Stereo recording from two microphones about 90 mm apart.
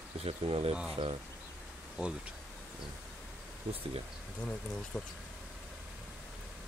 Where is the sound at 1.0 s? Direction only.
55° right (ahead or behind).